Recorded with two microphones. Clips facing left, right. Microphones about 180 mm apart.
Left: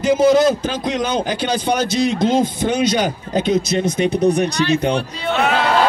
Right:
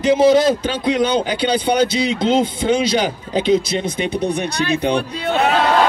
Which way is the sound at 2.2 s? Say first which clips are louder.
Even; 30° right (ahead or behind).